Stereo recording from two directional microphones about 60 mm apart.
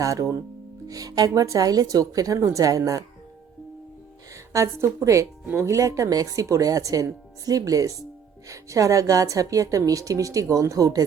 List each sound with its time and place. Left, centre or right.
0.0 s a woman's voice: right
0.9 s a woman's voice: right
4.5 s a woman's voice: right
5.2 s speech: right
5.6 s a woman's voice: right